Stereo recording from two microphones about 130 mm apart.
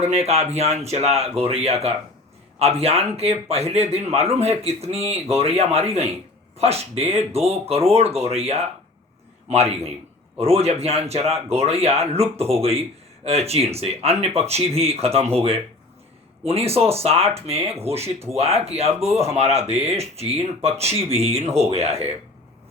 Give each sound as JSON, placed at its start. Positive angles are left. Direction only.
{"t": 0.0, "sound": "speech", "side_deg": -55}